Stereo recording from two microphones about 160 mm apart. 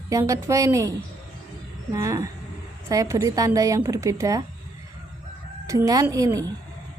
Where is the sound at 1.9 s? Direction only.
20° right (ahead or behind).